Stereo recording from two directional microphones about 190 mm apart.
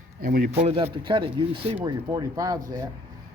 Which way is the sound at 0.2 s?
50° right (ahead or behind).